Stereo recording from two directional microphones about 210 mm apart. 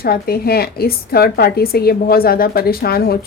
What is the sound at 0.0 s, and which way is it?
A woman's voice, 45° left (ahead or behind).